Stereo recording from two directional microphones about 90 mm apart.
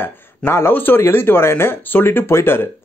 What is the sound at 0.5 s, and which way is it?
Speech, 25° left (ahead or behind).